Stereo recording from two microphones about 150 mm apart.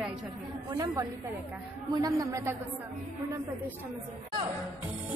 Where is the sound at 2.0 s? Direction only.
20° right (ahead or behind).